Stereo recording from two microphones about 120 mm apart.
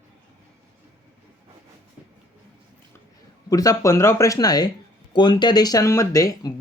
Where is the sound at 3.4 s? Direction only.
30° left (ahead or behind).